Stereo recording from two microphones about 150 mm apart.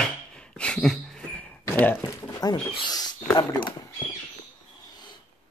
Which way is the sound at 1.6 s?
15° left (ahead or behind).